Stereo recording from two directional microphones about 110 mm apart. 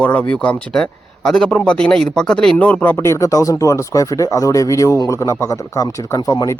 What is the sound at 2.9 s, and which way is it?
Speech, 25° left (ahead or behind).